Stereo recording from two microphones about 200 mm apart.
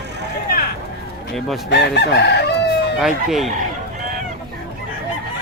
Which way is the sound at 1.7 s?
60° left (ahead or behind).